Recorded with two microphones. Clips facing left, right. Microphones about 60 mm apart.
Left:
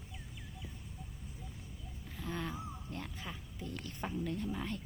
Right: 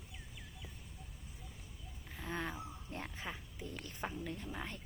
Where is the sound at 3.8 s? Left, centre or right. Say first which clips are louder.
Left 3 dB; centre.